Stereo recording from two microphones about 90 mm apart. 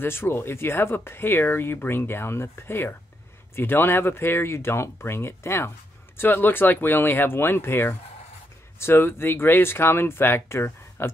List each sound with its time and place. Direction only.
0.0 s speech: 25° left (ahead or behind)